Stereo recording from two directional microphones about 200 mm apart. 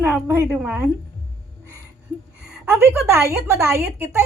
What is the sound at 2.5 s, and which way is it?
A woman's voice, 10° right (ahead or behind).